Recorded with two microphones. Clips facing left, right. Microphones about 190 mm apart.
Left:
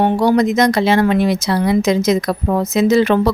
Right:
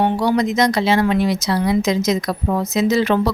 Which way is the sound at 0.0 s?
50° left (ahead or behind).